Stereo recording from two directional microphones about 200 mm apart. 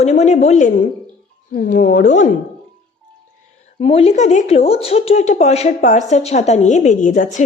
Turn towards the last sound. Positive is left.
turn(degrees=40)  # may be behind; listen again after turning